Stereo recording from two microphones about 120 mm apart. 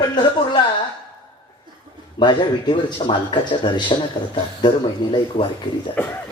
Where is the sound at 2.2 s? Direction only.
40° left (ahead or behind).